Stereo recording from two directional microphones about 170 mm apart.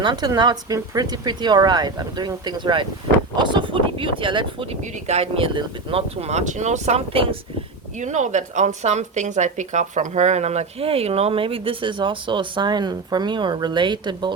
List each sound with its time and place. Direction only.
0.0 s a woman's voice: 25° right (ahead or behind)
7.9 s a woman's voice: 45° right (ahead or behind); by 14.3 s 25° right (ahead or behind)